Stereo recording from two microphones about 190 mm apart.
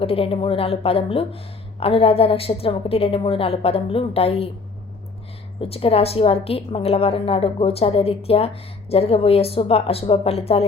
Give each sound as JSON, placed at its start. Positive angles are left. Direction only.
{"t": 0.0, "sound": "a woman's voice", "side_deg": 30}
{"t": 5.5, "sound": "a woman's voice", "side_deg": 30}